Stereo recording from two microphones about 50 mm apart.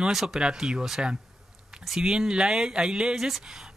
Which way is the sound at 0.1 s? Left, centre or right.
Centre.